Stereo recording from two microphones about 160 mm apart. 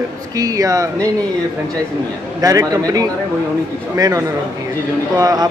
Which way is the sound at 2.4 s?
20° right (ahead or behind).